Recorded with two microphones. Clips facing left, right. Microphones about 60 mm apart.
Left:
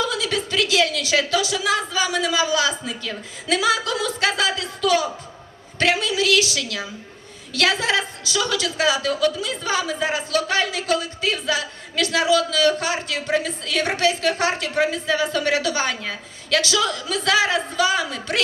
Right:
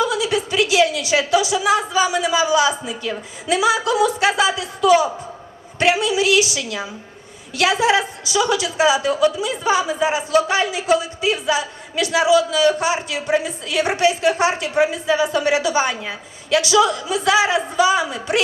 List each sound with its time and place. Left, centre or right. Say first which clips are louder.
0.0 s a woman's voice: right 4 dB; centre